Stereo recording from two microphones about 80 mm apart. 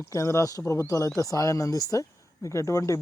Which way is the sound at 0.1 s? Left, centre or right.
Left.